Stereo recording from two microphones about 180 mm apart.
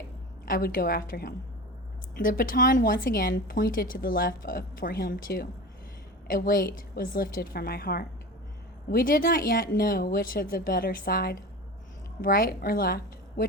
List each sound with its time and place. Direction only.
0.4 s a woman's voice: 55° left (ahead or behind)